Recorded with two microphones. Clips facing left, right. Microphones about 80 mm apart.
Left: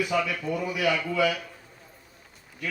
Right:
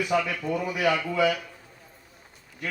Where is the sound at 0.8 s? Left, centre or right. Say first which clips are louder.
Right 1 dB; right.